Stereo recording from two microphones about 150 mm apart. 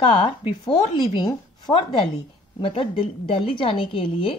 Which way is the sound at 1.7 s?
10° left (ahead or behind).